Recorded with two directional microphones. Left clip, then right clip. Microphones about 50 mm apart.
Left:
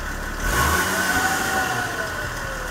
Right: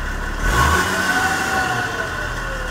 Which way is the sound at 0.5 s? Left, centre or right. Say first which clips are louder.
Right 4 dB; centre.